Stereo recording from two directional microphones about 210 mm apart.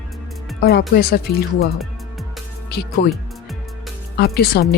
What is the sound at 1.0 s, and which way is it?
Speech, 45° left (ahead or behind).